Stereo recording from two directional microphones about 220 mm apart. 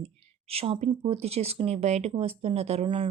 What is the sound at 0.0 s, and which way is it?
Speech, 25° right (ahead or behind).